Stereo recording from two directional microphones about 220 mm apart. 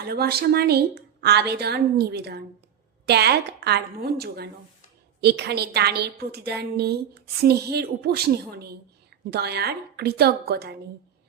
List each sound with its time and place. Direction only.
0.0 s a woman's voice: 45° right (ahead or behind)